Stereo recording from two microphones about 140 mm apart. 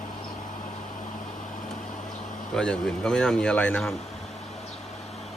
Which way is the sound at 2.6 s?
5° left (ahead or behind).